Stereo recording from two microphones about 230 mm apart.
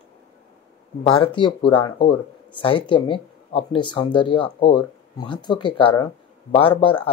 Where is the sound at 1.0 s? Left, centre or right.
Left.